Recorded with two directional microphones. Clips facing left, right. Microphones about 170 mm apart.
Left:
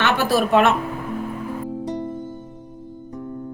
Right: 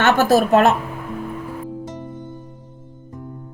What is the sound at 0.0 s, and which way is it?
Speech, 45° right (ahead or behind).